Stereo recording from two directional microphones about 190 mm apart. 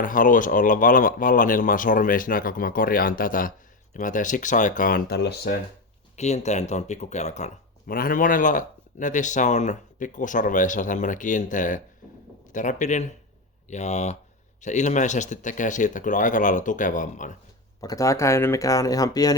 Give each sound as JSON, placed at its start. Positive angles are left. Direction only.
{"t": 0.0, "sound": "speech", "side_deg": 45}
{"t": 6.1, "sound": "speech", "side_deg": 35}
{"t": 17.7, "sound": "speech", "side_deg": 15}